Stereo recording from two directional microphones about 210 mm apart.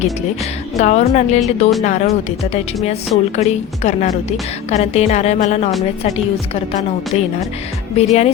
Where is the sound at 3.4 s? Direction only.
35° left (ahead or behind).